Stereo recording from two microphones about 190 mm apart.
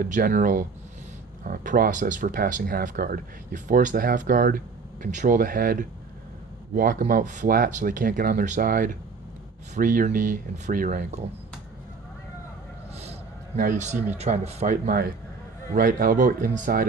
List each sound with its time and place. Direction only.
0.0 s speech: 50° right (ahead or behind)
13.6 s a man's voice: 45° right (ahead or behind)
14.8 s speech: 50° right (ahead or behind)